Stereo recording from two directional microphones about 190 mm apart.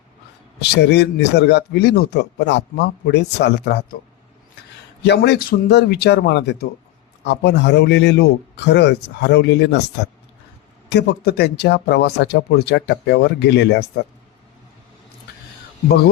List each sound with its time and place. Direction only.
0.6 s speech: 60° left (ahead or behind)
5.0 s speech: 60° left (ahead or behind)